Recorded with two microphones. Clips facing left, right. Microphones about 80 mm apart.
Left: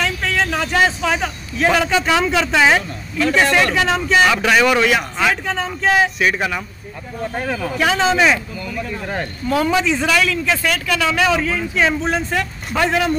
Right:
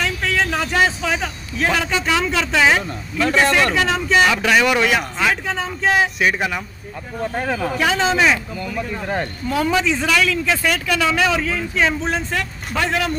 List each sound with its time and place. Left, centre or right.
0.0 s a man's voice: centre
7.4 s speech: right
7.7 s a man's voice: centre
9.6 s a man's voice: centre